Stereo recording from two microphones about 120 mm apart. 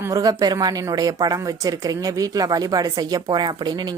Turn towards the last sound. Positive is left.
turn(degrees=-35)  # may be behind; listen again after turning